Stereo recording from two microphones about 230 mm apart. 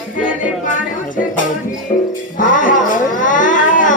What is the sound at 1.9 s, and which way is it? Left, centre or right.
Music, left.